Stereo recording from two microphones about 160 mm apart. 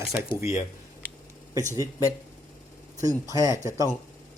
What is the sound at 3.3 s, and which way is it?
Speech, 20° right (ahead or behind).